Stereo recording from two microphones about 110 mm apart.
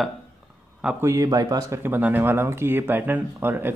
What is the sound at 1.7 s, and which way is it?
Speech, 20° right (ahead or behind).